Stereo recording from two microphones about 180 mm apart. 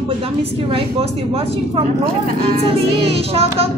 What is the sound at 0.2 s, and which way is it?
Speech, 30° right (ahead or behind).